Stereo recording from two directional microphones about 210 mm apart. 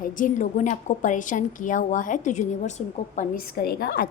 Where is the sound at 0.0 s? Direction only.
40° left (ahead or behind).